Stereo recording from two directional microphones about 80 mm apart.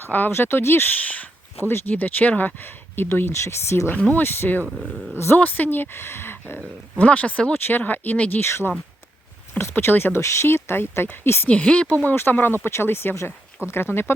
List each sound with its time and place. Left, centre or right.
0.0 s speech: left
3.9 s speech: centre
11.4 s speech: centre
12.0 s speech: left